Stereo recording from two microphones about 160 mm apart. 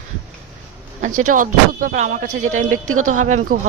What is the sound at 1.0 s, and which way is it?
Speech, 55° right (ahead or behind).